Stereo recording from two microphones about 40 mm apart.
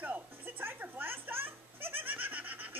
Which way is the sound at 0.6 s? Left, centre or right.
Right.